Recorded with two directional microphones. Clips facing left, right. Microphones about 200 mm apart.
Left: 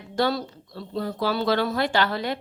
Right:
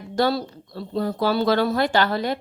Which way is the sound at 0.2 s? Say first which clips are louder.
Right 3 dB; 35° right (ahead or behind).